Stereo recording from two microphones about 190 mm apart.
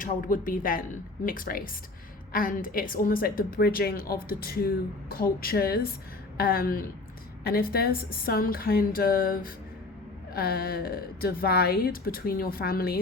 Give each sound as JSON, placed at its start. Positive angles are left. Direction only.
{"t": 0.0, "sound": "a woman's voice", "side_deg": 45}